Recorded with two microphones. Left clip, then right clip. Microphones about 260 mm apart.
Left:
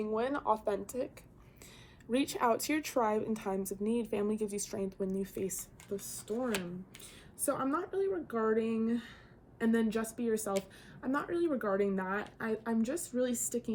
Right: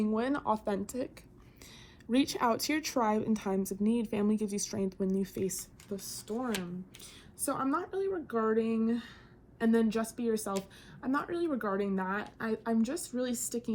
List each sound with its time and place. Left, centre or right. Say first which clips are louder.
0.0 s speech: right 1 dB; right
7.4 s speech: right 1 dB; centre